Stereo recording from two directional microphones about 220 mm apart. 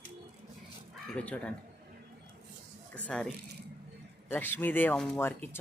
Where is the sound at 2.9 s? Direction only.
5° left (ahead or behind).